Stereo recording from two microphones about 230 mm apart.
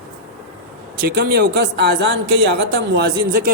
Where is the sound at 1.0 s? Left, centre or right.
Right.